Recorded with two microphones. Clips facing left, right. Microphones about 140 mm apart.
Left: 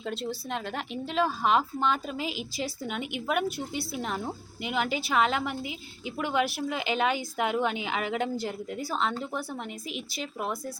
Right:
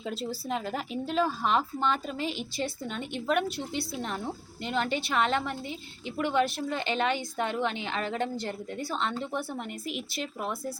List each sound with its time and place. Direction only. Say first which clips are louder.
0.0 s a woman's voice: left 1 dB; 5° right (ahead or behind)